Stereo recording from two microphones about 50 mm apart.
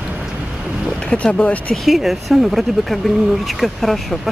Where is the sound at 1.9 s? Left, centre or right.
Centre.